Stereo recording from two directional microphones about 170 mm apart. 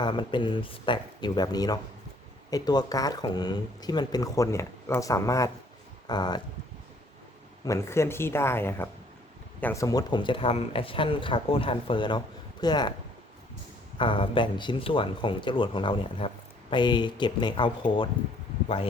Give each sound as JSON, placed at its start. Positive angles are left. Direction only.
{"t": 0.0, "sound": "speech", "side_deg": 30}
{"t": 7.6, "sound": "speech", "side_deg": 15}
{"t": 14.0, "sound": "speech", "side_deg": 30}